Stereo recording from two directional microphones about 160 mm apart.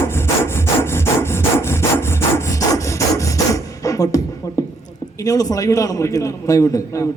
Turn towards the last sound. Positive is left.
turn(degrees=20)  # may be behind; listen again after turning